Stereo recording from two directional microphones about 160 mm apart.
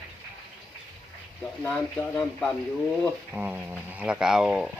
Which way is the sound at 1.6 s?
15° left (ahead or behind).